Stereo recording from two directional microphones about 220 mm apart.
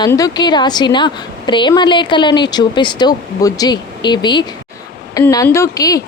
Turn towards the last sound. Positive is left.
turn(degrees=15)  # may be behind; listen again after turning